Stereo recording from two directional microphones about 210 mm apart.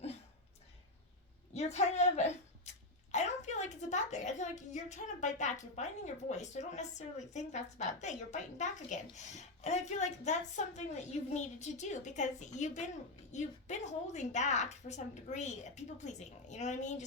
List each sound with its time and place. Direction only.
1.5 s a woman's voice: 30° left (ahead or behind)